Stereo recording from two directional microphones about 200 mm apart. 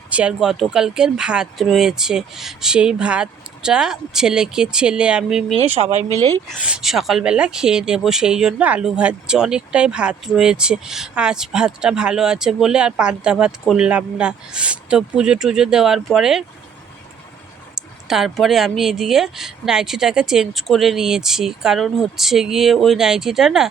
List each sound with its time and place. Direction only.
0.1 s speech: 5° right (ahead or behind)
5.5 s speech: 30° right (ahead or behind)
6.5 s speech: centre (ahead or behind)
17.7 s speech: centre (ahead or behind)